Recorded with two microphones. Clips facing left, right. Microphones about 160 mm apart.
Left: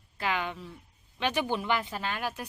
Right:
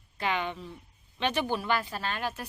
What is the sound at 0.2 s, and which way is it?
A woman's voice, 5° left (ahead or behind).